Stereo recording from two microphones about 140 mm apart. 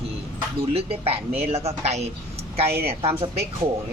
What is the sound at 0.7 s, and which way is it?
Speech, 45° right (ahead or behind).